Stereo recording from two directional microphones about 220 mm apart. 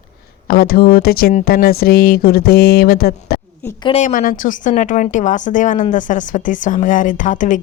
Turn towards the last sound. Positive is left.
turn(degrees=35)  # may be behind; listen again after turning